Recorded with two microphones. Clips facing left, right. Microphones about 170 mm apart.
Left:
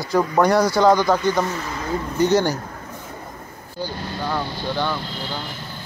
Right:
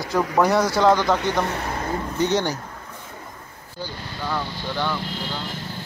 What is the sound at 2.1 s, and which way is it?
Speech, centre (ahead or behind).